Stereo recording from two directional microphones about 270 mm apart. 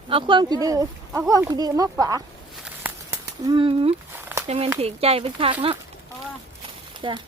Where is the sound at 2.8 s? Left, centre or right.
Centre.